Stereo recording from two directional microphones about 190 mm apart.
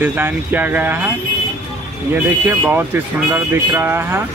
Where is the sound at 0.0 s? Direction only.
10° right (ahead or behind).